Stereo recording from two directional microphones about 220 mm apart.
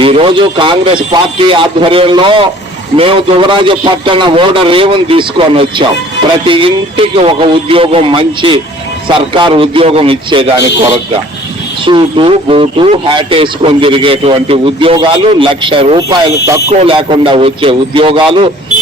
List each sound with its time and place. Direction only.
0.0 s a man's voice: 25° right (ahead or behind)
11.9 s a man's voice: 20° right (ahead or behind)